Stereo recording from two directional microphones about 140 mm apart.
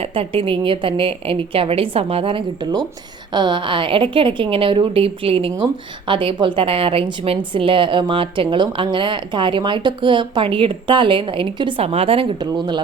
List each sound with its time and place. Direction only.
0.0 s a woman's voice: 45° right (ahead or behind)
12.4 s a woman's voice: 30° right (ahead or behind)